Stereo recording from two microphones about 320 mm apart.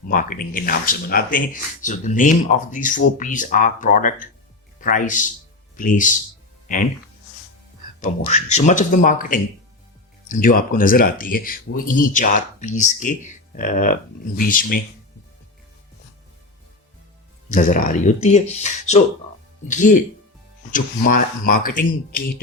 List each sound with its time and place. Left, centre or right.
0.1 s speech: left
8.0 s speech: left
17.5 s speech: left